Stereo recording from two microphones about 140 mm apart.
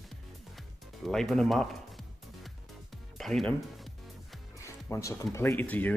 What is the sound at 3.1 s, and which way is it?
Music, centre (ahead or behind).